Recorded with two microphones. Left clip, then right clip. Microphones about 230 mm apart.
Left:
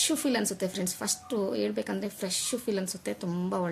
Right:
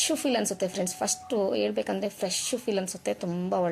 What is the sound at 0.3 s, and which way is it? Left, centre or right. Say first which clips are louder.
Speech: right 2 dB; centre.